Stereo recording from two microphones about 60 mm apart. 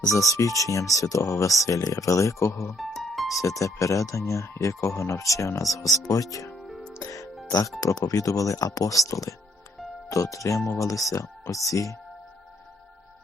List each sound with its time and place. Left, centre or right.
0.0 s speech: left
2.5 s speech: left
2.7 s music: centre
3.3 s speech: left
6.6 s music: centre
7.0 s music: left
7.8 s speech: left